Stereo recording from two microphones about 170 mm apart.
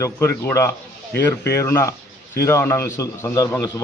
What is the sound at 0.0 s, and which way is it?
Speech, 15° left (ahead or behind).